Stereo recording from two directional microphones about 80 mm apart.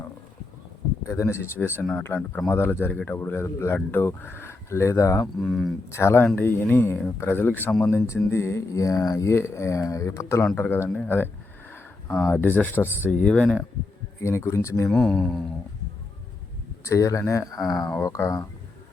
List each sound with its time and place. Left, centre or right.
1.0 s speech: left
1.8 s speech: centre; by 2.7 s left
2.9 s speech: centre
3.2 s speech: left
5.4 s speech: centre
5.9 s speech: left
7.9 s speech: left
13.2 s speech: centre
14.2 s speech: left
14.8 s speech: centre
16.8 s speech: left
18.0 s speech: left